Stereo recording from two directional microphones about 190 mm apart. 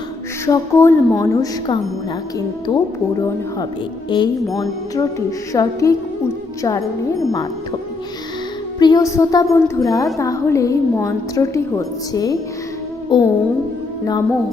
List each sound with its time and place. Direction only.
0.4 s a woman's voice: 15° left (ahead or behind)
4.1 s a woman's voice: 25° left (ahead or behind)
8.8 s a woman's voice: 20° left (ahead or behind)